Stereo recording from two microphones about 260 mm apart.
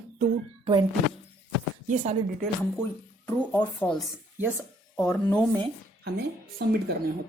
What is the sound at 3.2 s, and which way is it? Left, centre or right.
Speech, centre.